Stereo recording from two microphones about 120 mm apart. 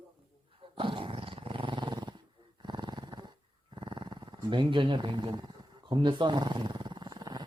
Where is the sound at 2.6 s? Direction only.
40° right (ahead or behind).